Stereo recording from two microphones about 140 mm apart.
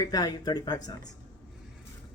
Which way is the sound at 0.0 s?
30° left (ahead or behind).